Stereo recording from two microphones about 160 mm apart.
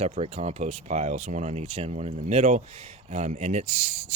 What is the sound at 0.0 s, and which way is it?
Speech, 40° right (ahead or behind).